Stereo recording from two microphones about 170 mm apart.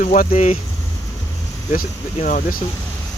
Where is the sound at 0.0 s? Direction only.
50° left (ahead or behind).